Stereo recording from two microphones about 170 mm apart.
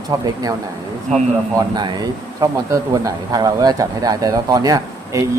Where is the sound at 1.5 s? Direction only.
25° right (ahead or behind).